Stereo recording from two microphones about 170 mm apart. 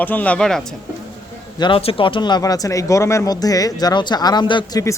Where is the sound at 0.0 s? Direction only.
10° left (ahead or behind).